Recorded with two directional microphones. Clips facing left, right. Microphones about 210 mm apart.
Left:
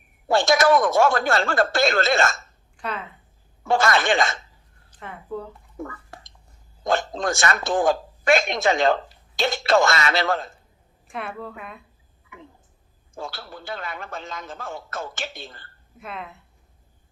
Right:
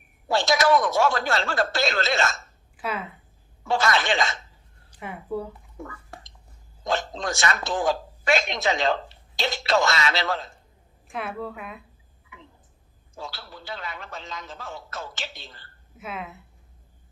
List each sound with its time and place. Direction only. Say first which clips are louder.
0.3 s a man's voice: left 3 dB; 50° left (ahead or behind)
2.7 s speech: right 1 dB; 5° right (ahead or behind)
3.6 s a man's voice: left 3 dB; 50° left (ahead or behind)
4.9 s a woman's voice: right 2 dB; 10° right (ahead or behind)
5.7 s a sound: left 9 dB; 50° left (ahead or behind)
6.8 s a man's voice: left 4 dB; 50° left (ahead or behind)
11.1 s a woman's voice: right 1 dB; centre (ahead or behind)
12.3 s a sound: left 5 dB; 50° left (ahead or behind)
13.1 s a man's voice: left 4 dB; 50° left (ahead or behind)
16.0 s a woman's voice: right 1 dB; centre (ahead or behind)